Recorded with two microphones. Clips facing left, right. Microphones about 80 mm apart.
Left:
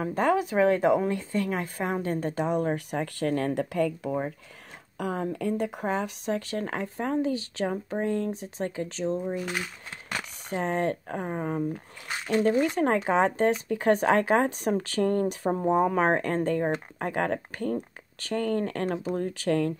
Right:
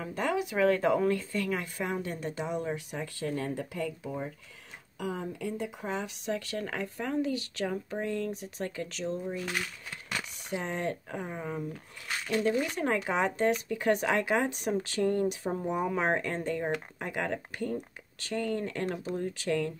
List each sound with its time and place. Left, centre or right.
0.0 s speech: left
0.6 s speech: left
9.4 s speech: centre
10.5 s speech: left